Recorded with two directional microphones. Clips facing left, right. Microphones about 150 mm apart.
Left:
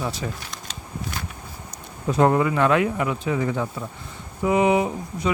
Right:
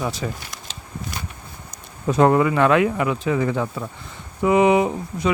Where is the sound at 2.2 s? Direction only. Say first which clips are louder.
Right 3 dB; 80° right.